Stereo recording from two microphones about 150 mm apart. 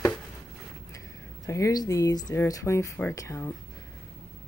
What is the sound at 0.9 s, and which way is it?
Speech, 20° left (ahead or behind).